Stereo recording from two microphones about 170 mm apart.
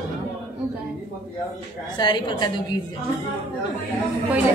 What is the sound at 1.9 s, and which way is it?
Speech, 25° left (ahead or behind).